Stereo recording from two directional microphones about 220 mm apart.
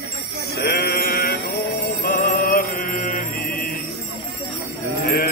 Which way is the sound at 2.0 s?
45° left (ahead or behind).